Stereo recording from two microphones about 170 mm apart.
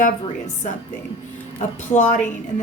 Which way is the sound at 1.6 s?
45° left (ahead or behind).